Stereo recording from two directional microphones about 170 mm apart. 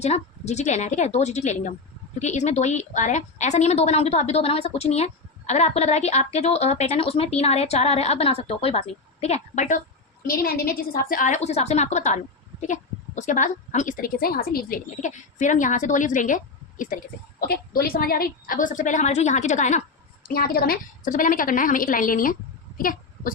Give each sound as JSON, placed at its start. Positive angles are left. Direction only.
{"t": 0.0, "sound": "a woman's voice", "side_deg": 40}
{"t": 10.2, "sound": "a woman's voice", "side_deg": 55}
{"t": 17.4, "sound": "a woman's voice", "side_deg": 60}
{"t": 20.2, "sound": "a woman's voice", "side_deg": 60}
{"t": 22.8, "sound": "a sound", "side_deg": 55}